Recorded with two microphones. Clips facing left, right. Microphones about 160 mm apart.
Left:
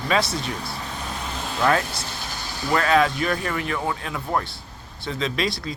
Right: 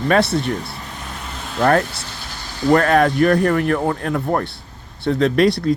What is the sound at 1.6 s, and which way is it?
Speech, 50° right (ahead or behind).